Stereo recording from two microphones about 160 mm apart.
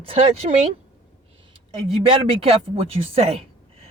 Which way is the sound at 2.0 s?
40° right (ahead or behind).